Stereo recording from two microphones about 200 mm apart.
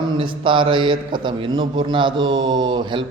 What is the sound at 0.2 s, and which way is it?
A man's voice, 25° right (ahead or behind).